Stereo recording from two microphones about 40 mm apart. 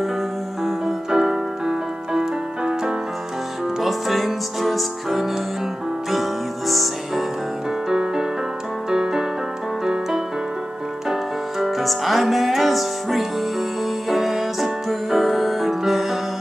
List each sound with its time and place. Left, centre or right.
0.7 s music: centre
3.8 s music: centre
6.7 s music: centre
7.9 s music: centre
11.6 s music: centre